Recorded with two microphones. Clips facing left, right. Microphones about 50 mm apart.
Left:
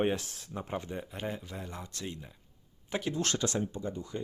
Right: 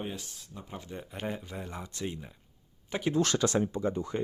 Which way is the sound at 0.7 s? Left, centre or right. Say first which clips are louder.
Left 7 dB; left.